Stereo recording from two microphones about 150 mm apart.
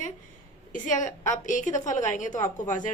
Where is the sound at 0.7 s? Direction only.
60° left (ahead or behind).